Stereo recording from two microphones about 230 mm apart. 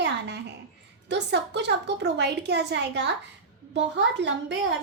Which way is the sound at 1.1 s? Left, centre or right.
Right.